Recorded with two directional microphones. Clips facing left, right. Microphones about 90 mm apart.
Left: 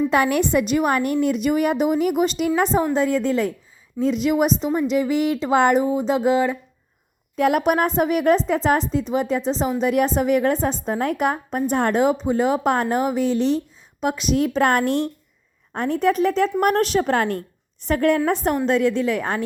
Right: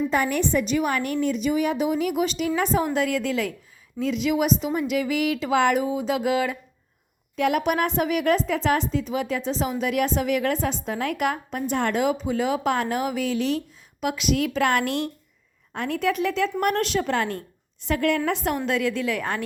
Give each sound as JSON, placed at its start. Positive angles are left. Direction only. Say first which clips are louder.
{"t": 0.1, "sound": "a woman's voice", "louder": "left 4 dB", "side_deg": 65}
{"t": 7.3, "sound": "a woman's voice", "louder": "left 4 dB", "side_deg": 45}